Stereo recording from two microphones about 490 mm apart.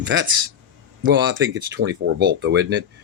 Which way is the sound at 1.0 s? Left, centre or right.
Right.